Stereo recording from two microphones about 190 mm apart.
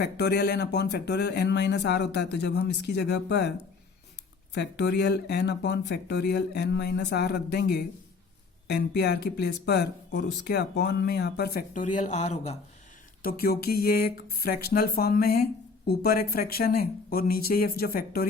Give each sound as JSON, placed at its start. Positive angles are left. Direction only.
{"t": 0.0, "sound": "speech", "side_deg": 60}
{"t": 4.5, "sound": "speech", "side_deg": 60}
{"t": 13.2, "sound": "speech", "side_deg": 50}